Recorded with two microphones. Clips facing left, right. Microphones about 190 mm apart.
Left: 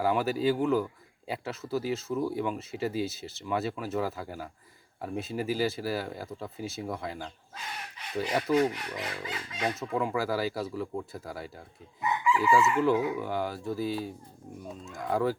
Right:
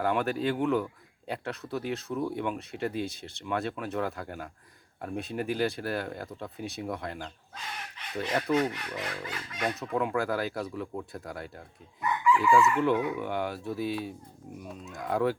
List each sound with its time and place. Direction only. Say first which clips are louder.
0.0 s speech: left 1 dB; 5° left (ahead or behind)
9.0 s a sound: even; 15° left (ahead or behind)
9.7 s speech: right 2 dB; centre (ahead or behind)